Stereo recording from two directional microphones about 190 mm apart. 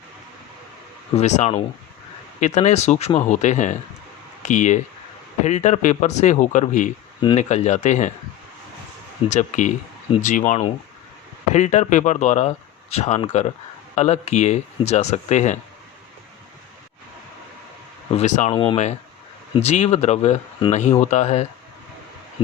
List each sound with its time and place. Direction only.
1.1 s speech: 35° left (ahead or behind)
9.3 s speech: 40° left (ahead or behind)
18.2 s speech: 35° left (ahead or behind)